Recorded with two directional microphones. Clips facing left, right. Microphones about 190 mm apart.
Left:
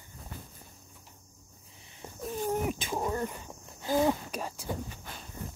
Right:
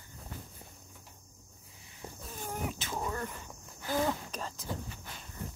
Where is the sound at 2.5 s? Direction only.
15° left (ahead or behind).